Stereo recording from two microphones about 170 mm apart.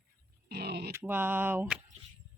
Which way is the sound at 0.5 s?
65° right (ahead or behind).